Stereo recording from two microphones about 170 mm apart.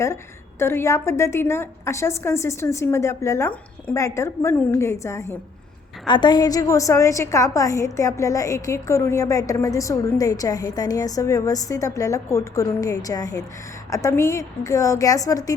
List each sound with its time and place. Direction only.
0.6 s a woman's voice: 15° left (ahead or behind)